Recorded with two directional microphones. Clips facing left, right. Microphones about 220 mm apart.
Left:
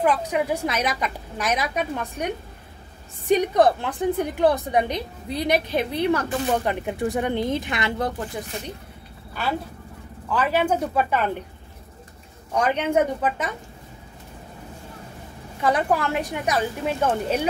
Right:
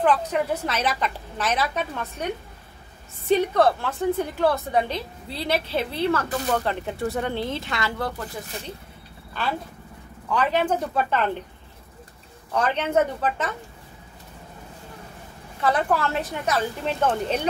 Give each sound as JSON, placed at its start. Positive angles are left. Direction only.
{"t": 0.0, "sound": "a woman's voice", "side_deg": 10}
{"t": 3.3, "sound": "a woman's voice", "side_deg": 15}
{"t": 9.4, "sound": "a woman's voice", "side_deg": 10}
{"t": 12.5, "sound": "a woman's voice", "side_deg": 10}
{"t": 15.6, "sound": "a woman's voice", "side_deg": 15}